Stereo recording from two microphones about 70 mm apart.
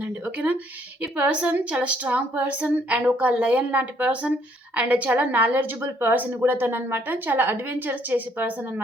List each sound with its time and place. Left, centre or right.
0.0 s a woman's voice: right